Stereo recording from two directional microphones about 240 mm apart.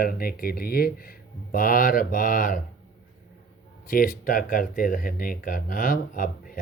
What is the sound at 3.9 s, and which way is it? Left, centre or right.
Speech, left.